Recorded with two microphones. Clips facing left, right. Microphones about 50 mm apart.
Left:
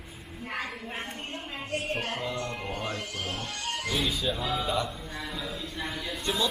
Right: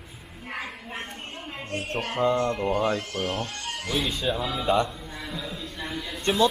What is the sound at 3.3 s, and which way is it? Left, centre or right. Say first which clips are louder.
Speech: right 2 dB; centre.